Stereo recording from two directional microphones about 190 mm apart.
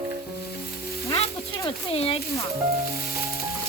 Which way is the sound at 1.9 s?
30° left (ahead or behind).